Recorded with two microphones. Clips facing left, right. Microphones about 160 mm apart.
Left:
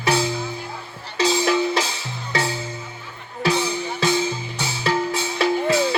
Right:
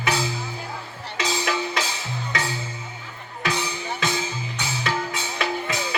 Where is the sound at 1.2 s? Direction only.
30° left (ahead or behind).